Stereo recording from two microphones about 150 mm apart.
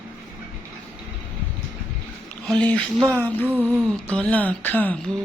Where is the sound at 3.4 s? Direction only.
10° right (ahead or behind).